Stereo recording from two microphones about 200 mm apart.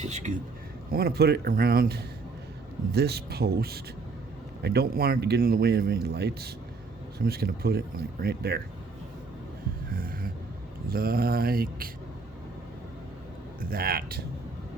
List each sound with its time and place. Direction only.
0.0 s speech: 35° right (ahead or behind)
0.9 s speech: 50° right (ahead or behind)
9.9 s a sound: 45° right (ahead or behind)
10.8 s speech: 50° right (ahead or behind)
13.6 s speech: 45° right (ahead or behind)